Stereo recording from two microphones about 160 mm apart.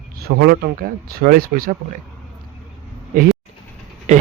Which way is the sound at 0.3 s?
70° right (ahead or behind).